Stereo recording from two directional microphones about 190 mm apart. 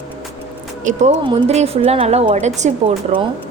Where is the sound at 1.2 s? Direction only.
30° right (ahead or behind).